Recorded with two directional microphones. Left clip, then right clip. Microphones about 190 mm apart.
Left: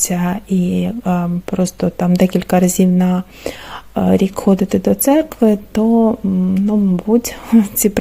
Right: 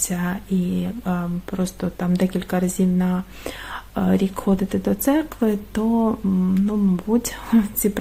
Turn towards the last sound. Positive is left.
turn(degrees=30)  # may be behind; listen again after turning